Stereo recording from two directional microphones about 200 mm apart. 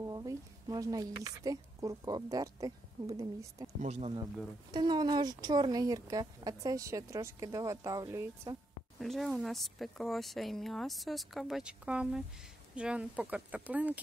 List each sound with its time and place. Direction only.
0.0 s a woman's voice: 15° right (ahead or behind)
3.8 s speech: 30° right (ahead or behind)
4.6 s a woman's voice: 20° right (ahead or behind)
9.0 s a woman's voice: centre (ahead or behind)